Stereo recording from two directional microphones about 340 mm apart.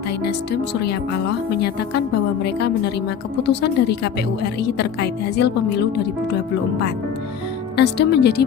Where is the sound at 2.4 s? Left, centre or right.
Left.